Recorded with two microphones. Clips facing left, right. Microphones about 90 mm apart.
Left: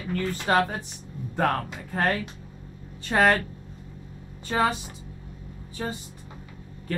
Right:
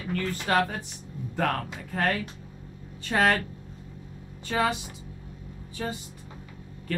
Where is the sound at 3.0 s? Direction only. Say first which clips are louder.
Left 3 dB; 35° left (ahead or behind).